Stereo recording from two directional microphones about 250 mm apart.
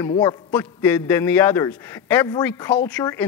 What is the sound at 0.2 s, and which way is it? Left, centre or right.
A man's voice, centre.